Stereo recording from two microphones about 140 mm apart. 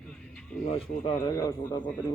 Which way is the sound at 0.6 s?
45° left (ahead or behind).